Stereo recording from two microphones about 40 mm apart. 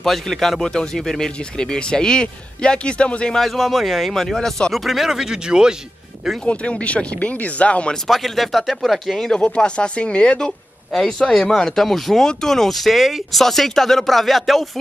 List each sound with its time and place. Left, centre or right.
0.0 s speech: centre; by 3.3 s left
3.3 s speech: centre
4.8 s speech: centre
6.4 s speech: left
8.1 s speech: centre
9.1 s speech: centre
9.4 s speech: left
10.9 s speech: centre
11.2 s speech: centre
11.8 s speech: centre